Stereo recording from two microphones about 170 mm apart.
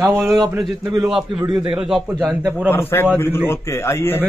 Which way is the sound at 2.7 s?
15° left (ahead or behind).